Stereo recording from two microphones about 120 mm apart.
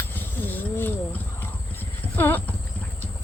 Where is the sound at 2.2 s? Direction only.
15° left (ahead or behind).